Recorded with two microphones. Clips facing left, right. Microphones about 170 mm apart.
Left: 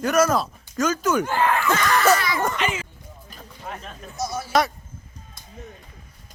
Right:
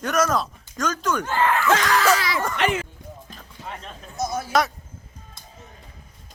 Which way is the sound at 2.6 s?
65° right (ahead or behind).